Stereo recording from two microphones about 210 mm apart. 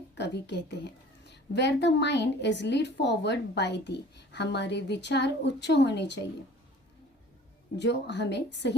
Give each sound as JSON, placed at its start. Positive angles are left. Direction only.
{"t": 0.2, "sound": "a woman's voice", "side_deg": 55}
{"t": 7.8, "sound": "a woman's voice", "side_deg": 55}